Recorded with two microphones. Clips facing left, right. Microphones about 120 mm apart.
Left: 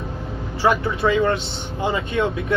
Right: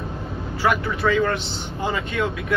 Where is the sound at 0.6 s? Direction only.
25° left (ahead or behind).